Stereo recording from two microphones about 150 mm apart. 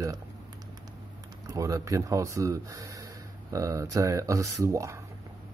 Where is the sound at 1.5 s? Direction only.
20° right (ahead or behind).